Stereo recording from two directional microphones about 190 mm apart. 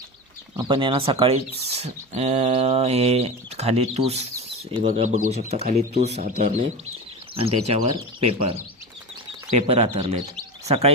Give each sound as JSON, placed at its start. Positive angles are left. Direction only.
{"t": 0.5, "sound": "speech", "side_deg": -25}
{"t": 9.6, "sound": "speech", "side_deg": -35}